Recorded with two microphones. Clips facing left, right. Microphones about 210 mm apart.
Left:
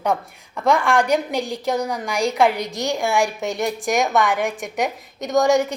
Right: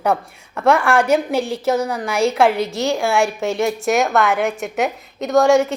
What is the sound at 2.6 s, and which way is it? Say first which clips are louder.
A woman's voice: right 4 dB; 15° left (ahead or behind).